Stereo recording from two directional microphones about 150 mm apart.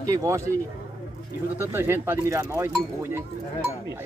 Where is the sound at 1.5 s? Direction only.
15° right (ahead or behind).